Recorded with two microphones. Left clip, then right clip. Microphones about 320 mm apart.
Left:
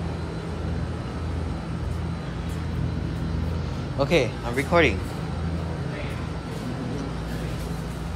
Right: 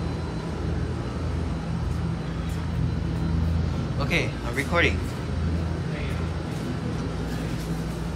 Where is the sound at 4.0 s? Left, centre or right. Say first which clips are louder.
Left 5 dB; centre.